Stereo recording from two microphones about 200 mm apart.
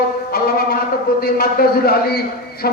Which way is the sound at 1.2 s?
50° left (ahead or behind).